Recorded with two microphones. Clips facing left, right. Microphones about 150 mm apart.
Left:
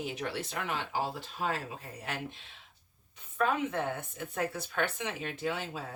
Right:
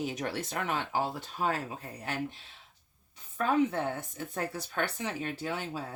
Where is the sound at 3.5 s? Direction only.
35° right (ahead or behind).